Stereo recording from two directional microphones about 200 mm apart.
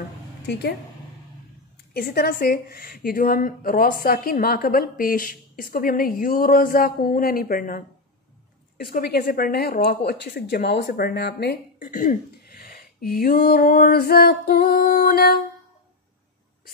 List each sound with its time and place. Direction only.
0.5 s speech: 55° left (ahead or behind)
2.0 s speech: 45° left (ahead or behind)